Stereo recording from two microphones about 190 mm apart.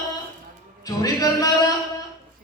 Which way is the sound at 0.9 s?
20° left (ahead or behind).